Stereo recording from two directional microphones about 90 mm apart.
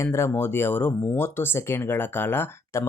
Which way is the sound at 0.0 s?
30° left (ahead or behind).